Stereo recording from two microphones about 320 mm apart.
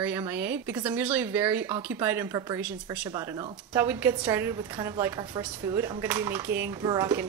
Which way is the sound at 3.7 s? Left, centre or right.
Centre.